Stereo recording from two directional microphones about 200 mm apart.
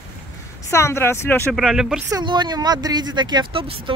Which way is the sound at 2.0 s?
20° right (ahead or behind).